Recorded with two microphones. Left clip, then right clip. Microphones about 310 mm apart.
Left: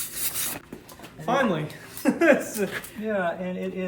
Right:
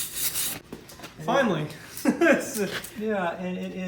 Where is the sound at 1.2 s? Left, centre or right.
Centre.